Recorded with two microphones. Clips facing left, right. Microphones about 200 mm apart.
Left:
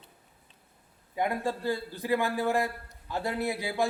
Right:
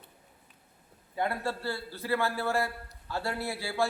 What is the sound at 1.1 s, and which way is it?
A man's voice, 15° left (ahead or behind).